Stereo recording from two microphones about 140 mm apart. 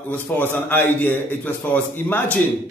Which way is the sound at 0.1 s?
15° left (ahead or behind).